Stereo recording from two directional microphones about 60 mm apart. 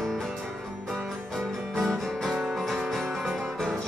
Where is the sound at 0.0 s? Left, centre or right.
Centre.